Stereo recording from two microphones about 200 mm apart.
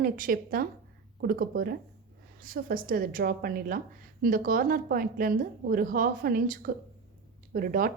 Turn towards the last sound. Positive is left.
turn(degrees=-45)  # may be behind; listen again after turning